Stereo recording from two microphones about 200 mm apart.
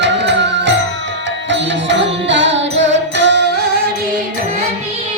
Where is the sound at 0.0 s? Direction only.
60° right (ahead or behind).